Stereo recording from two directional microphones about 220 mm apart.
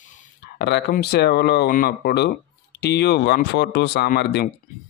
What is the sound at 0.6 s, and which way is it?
Speech, 50° left (ahead or behind).